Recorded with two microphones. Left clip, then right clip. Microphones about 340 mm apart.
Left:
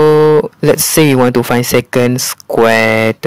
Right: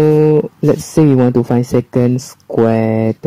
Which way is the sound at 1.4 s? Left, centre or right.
Left.